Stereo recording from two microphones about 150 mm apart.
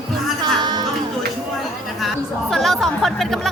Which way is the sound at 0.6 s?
30° right (ahead or behind).